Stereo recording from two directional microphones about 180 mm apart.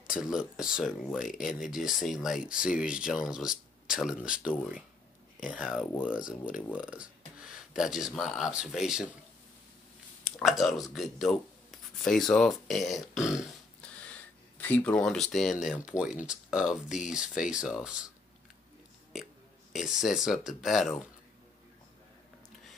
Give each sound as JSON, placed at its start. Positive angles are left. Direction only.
{"t": 0.0, "sound": "speech", "side_deg": -5}
{"t": 10.4, "sound": "speech", "side_deg": 0}
{"t": 19.7, "sound": "speech", "side_deg": 0}